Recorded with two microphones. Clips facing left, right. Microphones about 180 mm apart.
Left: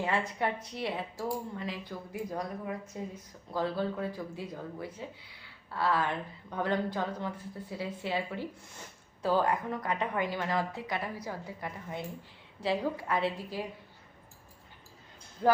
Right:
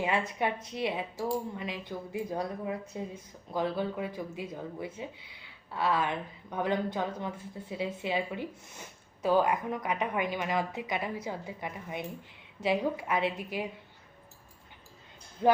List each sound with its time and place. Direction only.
0.0 s a woman's voice: 15° right (ahead or behind)